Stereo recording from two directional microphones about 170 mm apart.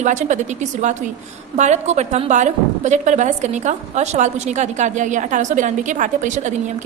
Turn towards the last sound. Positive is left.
turn(degrees=-45)  # may be behind; listen again after turning